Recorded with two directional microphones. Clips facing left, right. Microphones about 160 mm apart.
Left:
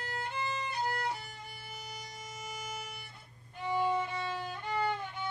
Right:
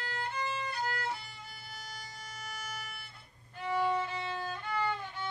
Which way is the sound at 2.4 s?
20° left (ahead or behind).